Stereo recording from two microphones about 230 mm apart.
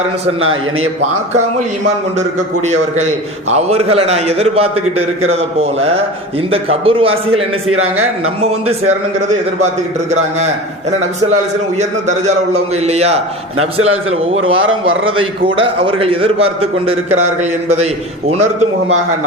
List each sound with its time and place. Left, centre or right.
2.6 s a man's voice: right
11.8 s a man's voice: right
14.5 s a man's voice: right
15.0 s a man's voice: right